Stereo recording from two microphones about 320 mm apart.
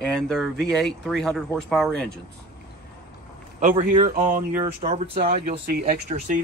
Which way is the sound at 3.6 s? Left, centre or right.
Right.